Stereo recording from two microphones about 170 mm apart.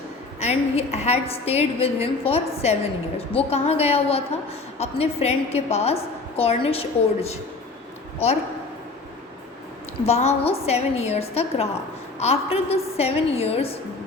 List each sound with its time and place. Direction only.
0.3 s a woman's voice: 40° left (ahead or behind)
10.1 s a woman's voice: 40° left (ahead or behind)